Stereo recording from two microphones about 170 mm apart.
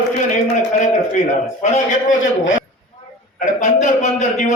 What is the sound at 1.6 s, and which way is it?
Speech, 45° left (ahead or behind).